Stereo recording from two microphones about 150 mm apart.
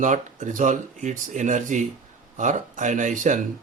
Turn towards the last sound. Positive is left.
turn(degrees=-55)  # may be behind; listen again after turning